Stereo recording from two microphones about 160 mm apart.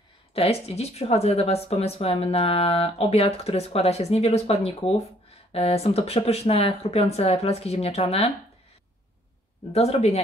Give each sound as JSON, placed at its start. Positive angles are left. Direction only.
{"t": 0.3, "sound": "speech", "side_deg": 40}
{"t": 9.7, "sound": "speech", "side_deg": 40}